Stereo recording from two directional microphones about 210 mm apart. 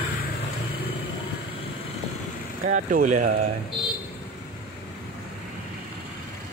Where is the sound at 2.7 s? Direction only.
35° right (ahead or behind).